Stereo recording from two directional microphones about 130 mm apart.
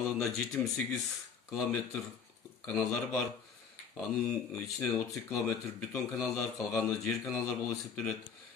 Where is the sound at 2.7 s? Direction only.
Centre (ahead or behind).